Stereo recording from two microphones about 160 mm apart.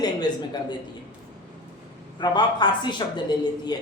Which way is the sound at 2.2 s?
30° left (ahead or behind).